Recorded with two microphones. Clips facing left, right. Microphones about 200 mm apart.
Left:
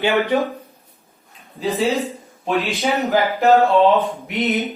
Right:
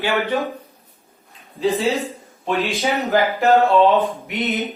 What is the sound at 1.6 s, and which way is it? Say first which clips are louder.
Speech: even; centre (ahead or behind).